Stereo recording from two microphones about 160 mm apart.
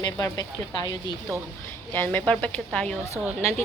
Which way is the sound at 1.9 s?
15° left (ahead or behind).